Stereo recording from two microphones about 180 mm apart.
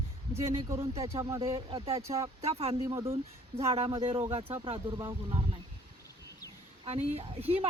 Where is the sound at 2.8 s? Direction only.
20° right (ahead or behind).